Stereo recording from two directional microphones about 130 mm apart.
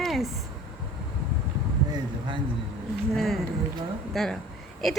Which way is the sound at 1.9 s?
40° right (ahead or behind).